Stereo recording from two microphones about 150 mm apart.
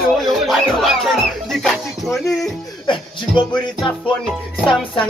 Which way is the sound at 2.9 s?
35° left (ahead or behind).